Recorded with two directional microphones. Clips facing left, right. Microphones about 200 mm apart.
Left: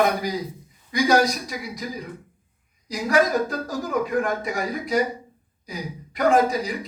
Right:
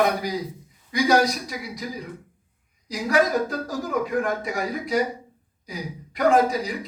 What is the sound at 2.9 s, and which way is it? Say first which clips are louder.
A man's voice: left 1 dB; 45° left (ahead or behind).